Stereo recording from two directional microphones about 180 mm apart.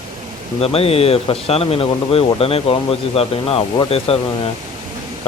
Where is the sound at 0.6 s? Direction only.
35° left (ahead or behind).